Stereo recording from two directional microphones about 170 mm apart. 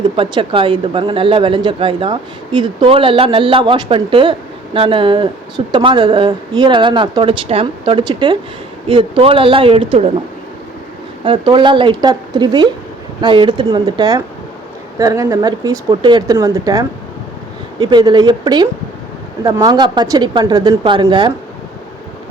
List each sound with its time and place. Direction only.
0.2 s speech: 30° right (ahead or behind)
11.2 s speech: 30° right (ahead or behind)